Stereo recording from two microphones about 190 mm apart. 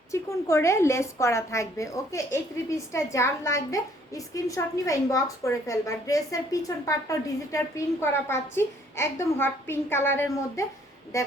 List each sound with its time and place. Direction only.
0.1 s a woman's voice: 15° left (ahead or behind)